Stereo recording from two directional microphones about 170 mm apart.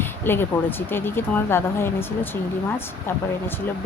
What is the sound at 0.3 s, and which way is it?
Speech, 15° left (ahead or behind).